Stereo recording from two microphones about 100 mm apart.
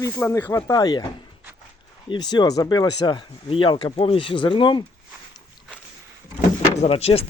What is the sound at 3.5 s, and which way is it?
Speech, 60° left (ahead or behind).